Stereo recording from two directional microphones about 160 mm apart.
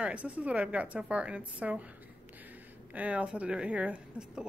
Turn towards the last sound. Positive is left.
turn(degrees=-5)  # may be behind; listen again after turning